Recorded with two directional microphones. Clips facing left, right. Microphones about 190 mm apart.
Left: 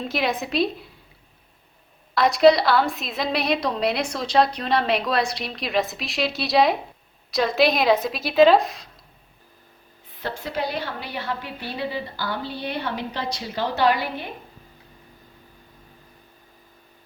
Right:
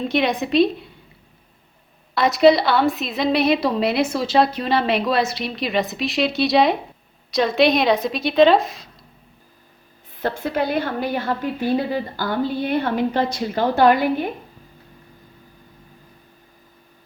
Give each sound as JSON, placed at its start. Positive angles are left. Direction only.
{"t": 0.0, "sound": "a woman's voice", "side_deg": 0}
{"t": 2.1, "sound": "a woman's voice", "side_deg": 0}
{"t": 10.2, "sound": "a woman's voice", "side_deg": -50}